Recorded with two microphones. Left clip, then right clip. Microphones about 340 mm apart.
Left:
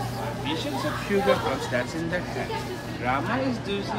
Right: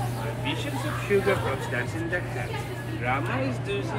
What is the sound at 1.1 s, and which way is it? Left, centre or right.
Speech, left.